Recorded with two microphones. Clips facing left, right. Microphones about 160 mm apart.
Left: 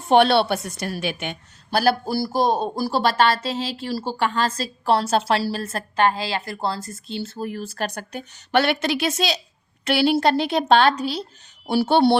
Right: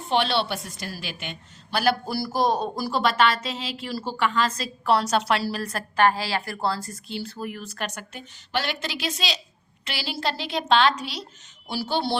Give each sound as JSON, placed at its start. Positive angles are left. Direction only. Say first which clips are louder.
{"t": 0.1, "sound": "a woman's voice", "louder": "left 8 dB", "side_deg": 55}
{"t": 1.8, "sound": "speech", "louder": "left 3 dB", "side_deg": 35}
{"t": 8.5, "sound": "a woman's voice", "louder": "left 9 dB", "side_deg": 60}
{"t": 11.6, "sound": "a woman's voice", "louder": "left 10 dB", "side_deg": 60}